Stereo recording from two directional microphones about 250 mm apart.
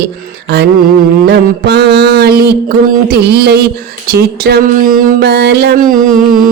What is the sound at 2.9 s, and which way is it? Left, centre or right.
Mantra, right.